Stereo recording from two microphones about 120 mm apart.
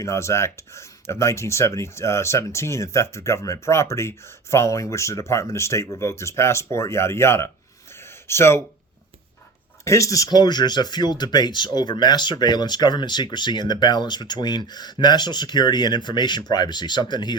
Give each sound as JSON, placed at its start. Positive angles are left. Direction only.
{"t": 0.0, "sound": "speech", "side_deg": 25}
{"t": 9.8, "sound": "speech", "side_deg": 25}